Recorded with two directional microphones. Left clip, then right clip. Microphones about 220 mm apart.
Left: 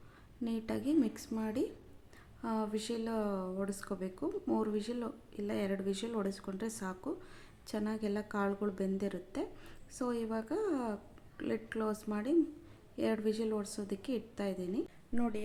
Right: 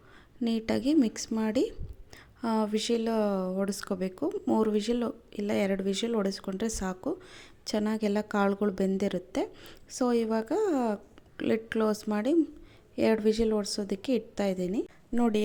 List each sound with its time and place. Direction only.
0.4 s speech: 35° right (ahead or behind)